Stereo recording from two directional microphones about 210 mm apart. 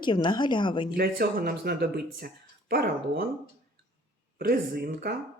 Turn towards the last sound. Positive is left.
turn(degrees=-45)  # may be behind; listen again after turning